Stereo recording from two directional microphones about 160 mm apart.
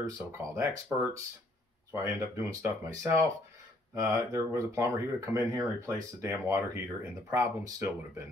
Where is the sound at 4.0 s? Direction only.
20° right (ahead or behind).